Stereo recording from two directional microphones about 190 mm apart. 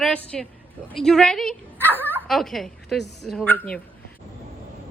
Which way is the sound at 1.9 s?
10° right (ahead or behind).